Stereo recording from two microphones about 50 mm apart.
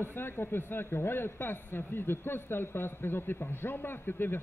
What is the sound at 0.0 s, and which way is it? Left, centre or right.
A man's voice, left.